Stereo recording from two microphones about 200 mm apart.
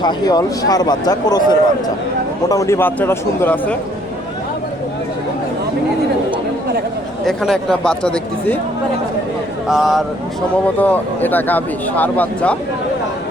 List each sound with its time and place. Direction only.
0.0 s speech: 20° left (ahead or behind)
7.3 s speech: centre (ahead or behind)
9.6 s speech: centre (ahead or behind)